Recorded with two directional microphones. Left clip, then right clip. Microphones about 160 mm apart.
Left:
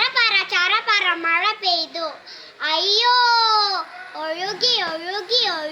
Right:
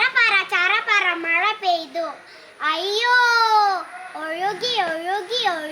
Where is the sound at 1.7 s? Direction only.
45° right (ahead or behind).